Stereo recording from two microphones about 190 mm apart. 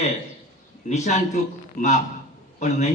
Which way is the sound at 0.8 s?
35° left (ahead or behind).